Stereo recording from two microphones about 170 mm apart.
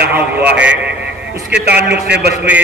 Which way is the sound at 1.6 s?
80° right.